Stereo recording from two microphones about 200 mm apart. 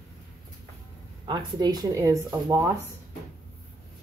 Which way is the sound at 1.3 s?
20° right (ahead or behind).